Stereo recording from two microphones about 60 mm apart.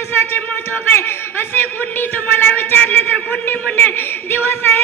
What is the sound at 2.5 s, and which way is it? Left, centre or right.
Speech, left.